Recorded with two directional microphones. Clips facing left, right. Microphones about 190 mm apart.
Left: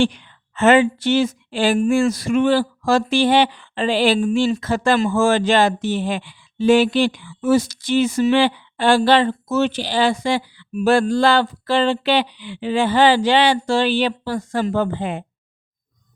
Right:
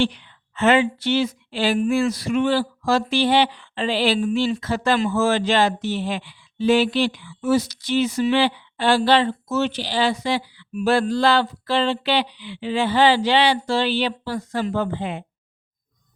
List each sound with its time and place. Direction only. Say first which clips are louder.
0.0 s speech: left 3 dB; 45° left (ahead or behind)